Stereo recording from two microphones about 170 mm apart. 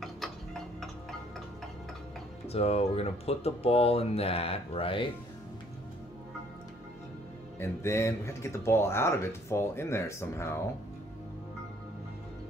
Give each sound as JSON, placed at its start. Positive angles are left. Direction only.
{"t": 2.4, "sound": "speech", "side_deg": 35}
{"t": 7.5, "sound": "speech", "side_deg": 15}